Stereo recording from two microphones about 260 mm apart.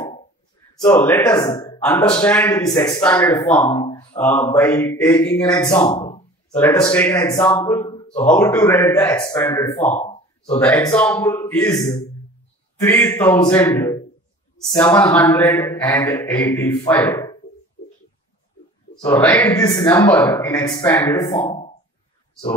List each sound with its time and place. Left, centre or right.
0.8 s speech: centre
3.9 s mantra: centre
4.2 s speech: centre; by 6.2 s left
6.5 s speech: centre
8.3 s speech: centre
9.9 s a sound: left
10.6 s speech: centre
12.8 s speech: centre
19.0 s speech: centre